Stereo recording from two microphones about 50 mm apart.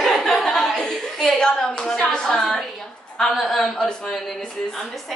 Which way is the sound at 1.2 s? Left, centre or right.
Centre.